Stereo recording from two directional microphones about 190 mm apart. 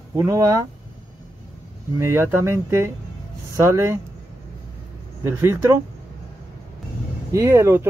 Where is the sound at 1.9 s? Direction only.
15° right (ahead or behind).